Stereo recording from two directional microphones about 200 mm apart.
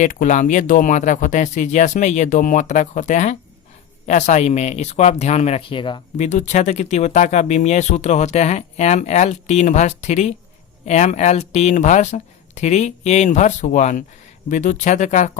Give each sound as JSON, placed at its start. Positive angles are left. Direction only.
{"t": 0.0, "sound": "speech", "side_deg": 40}
{"t": 6.2, "sound": "speech", "side_deg": 35}